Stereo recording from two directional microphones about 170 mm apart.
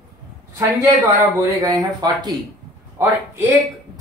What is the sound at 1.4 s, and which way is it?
Speech, 20° right (ahead or behind).